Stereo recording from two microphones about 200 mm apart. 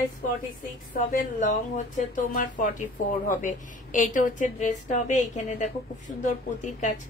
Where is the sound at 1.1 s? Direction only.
40° left (ahead or behind).